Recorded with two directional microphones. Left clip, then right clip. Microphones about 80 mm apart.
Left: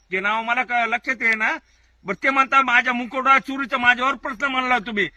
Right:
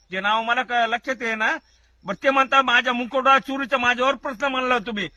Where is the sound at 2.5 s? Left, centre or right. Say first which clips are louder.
Left 1 dB; centre.